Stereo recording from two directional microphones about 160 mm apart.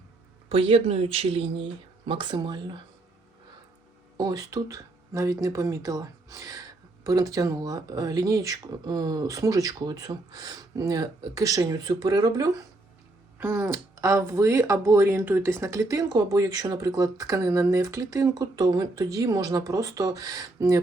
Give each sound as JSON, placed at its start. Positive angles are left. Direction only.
{"t": 0.4, "sound": "speech", "side_deg": -35}
{"t": 4.2, "sound": "speech", "side_deg": -25}